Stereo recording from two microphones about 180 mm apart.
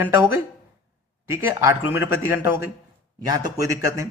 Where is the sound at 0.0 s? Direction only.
10° right (ahead or behind).